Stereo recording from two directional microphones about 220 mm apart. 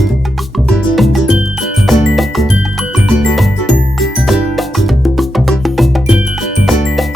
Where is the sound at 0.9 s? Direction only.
Centre (ahead or behind).